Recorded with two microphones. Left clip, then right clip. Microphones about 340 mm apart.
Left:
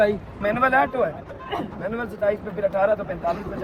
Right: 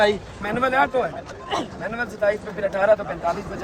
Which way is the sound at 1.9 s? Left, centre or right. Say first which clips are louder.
Right 2 dB; centre.